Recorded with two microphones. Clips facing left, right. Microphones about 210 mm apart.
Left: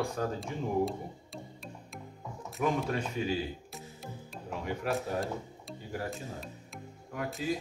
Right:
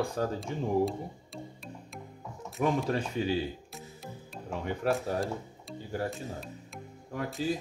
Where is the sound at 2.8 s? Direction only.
30° right (ahead or behind).